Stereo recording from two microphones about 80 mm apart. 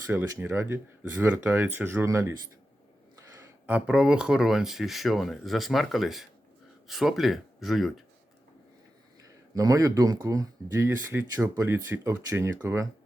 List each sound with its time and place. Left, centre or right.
0.1 s speech: right
2.0 s speech: right
3.7 s speech: centre
9.6 s speech: right
10.8 s speech: right